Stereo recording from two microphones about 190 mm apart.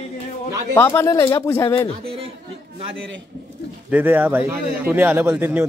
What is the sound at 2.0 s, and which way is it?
Speech, 30° right (ahead or behind).